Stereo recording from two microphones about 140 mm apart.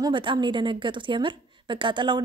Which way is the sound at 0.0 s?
35° right (ahead or behind).